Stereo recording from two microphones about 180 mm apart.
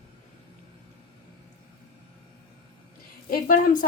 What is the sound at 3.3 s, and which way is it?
Speech, 50° left (ahead or behind).